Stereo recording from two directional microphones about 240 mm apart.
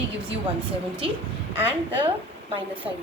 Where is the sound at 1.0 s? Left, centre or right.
Right.